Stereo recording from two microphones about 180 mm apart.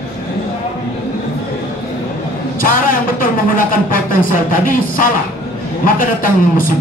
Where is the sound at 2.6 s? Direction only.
50° left (ahead or behind).